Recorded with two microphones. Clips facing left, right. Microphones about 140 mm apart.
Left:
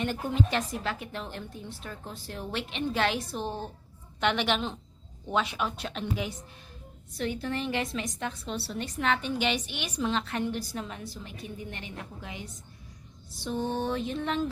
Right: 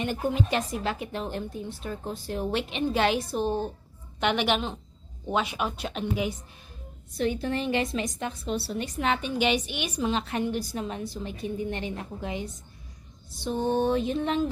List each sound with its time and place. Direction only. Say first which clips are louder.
0.0 s a woman's voice: right 2 dB; 15° right (ahead or behind)
8.4 s a woman's voice: right 4 dB; 10° right (ahead or behind)
10.8 s a woman's voice: right 7 dB; 25° right (ahead or behind)